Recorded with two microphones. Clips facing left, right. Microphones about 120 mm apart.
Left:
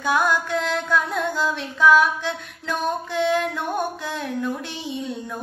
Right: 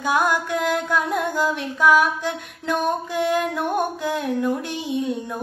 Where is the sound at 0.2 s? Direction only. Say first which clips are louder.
Right 1 dB; 50° right (ahead or behind).